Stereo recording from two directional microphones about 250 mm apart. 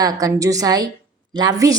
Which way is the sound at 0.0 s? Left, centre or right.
Centre.